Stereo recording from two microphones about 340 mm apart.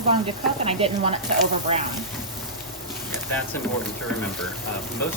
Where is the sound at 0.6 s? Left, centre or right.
Centre.